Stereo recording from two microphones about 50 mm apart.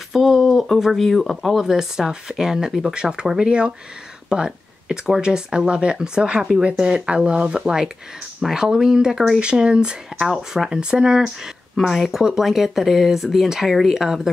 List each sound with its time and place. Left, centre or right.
0.1 s speech: centre
11.7 s speech: centre